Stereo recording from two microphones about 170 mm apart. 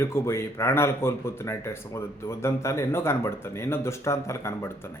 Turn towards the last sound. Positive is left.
turn(degrees=15)  # may be behind; listen again after turning